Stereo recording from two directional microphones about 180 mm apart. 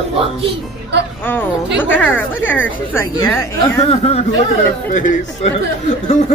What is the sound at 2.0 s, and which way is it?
A woman's voice, 10° left (ahead or behind).